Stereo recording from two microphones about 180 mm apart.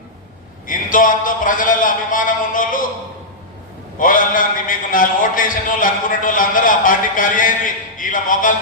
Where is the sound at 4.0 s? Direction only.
50° left (ahead or behind).